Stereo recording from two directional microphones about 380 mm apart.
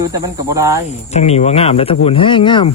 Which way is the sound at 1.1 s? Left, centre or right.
Centre.